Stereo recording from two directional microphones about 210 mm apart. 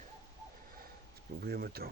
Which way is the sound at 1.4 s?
45° right (ahead or behind).